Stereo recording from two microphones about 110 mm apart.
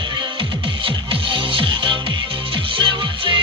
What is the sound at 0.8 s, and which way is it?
Music, 50° right (ahead or behind).